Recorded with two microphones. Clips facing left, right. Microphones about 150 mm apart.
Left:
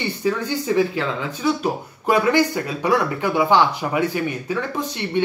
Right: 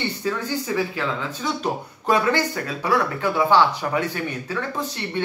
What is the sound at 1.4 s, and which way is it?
Speech, 10° left (ahead or behind).